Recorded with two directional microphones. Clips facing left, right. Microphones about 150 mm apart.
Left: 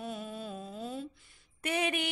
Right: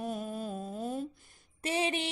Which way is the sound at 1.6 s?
30° right (ahead or behind).